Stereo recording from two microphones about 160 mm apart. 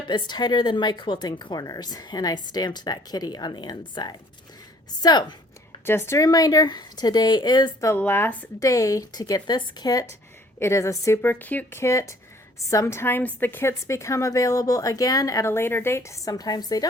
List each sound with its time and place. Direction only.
0.1 s a woman's voice: 25° left (ahead or behind)
5.8 s a woman's voice: 15° left (ahead or behind)
7.9 s a woman's voice: 15° left (ahead or behind)